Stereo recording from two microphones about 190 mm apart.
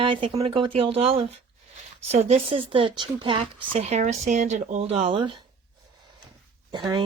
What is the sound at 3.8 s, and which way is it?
Speech, 35° right (ahead or behind).